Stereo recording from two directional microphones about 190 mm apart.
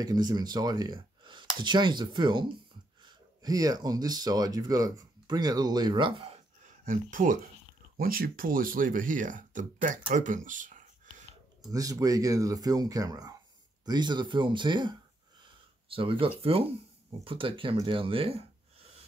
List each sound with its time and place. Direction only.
0.0 s speech: 20° right (ahead or behind)
6.9 s speech: 45° right (ahead or behind)
11.6 s speech: 20° right (ahead or behind)